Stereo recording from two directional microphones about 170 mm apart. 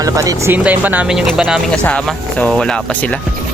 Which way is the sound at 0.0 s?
20° right (ahead or behind).